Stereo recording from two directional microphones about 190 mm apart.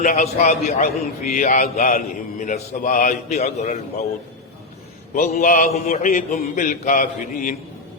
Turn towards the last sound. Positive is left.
turn(degrees=45)  # may be behind; listen again after turning